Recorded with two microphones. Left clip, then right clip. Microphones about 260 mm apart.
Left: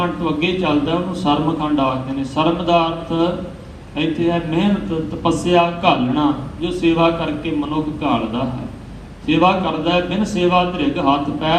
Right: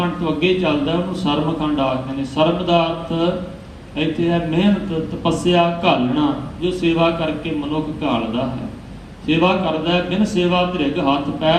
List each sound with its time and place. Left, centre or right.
0.0 s a man's voice: left
9.2 s a man's voice: left